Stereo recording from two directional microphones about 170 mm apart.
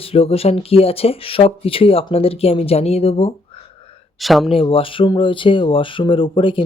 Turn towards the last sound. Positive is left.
turn(degrees=30)  # may be behind; listen again after turning